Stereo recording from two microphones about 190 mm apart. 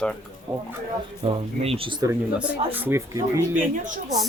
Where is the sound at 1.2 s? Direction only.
30° right (ahead or behind).